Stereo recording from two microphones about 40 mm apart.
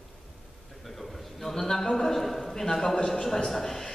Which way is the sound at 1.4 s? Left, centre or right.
Centre.